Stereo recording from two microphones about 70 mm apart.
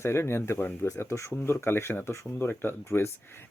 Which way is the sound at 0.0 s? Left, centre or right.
Left.